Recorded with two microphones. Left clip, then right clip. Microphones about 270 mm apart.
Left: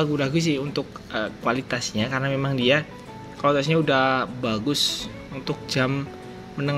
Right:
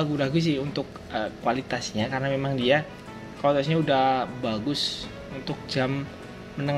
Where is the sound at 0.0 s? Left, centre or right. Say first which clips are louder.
Left 2 dB; centre.